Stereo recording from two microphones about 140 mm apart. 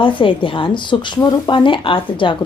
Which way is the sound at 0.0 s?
35° left (ahead or behind).